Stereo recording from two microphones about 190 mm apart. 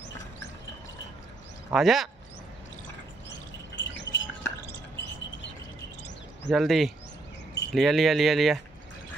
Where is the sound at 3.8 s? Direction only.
70° left (ahead or behind).